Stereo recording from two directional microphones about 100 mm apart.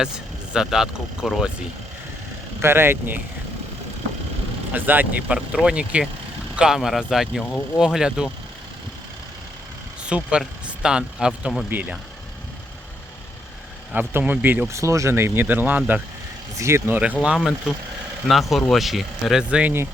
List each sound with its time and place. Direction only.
0.5 s speech: 5° right (ahead or behind)
2.6 s speech: 25° right (ahead or behind)
4.7 s speech: 15° right (ahead or behind)
10.0 s speech: 10° right (ahead or behind)
13.9 s speech: 20° right (ahead or behind)
14.8 s speech: 30° right (ahead or behind)
16.6 s speech: 30° right (ahead or behind)
17.2 s speech: 5° right (ahead or behind)